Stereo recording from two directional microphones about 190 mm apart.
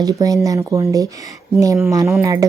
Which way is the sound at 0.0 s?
20° right (ahead or behind).